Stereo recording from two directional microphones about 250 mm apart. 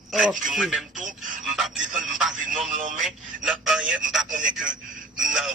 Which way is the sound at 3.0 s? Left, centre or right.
Centre.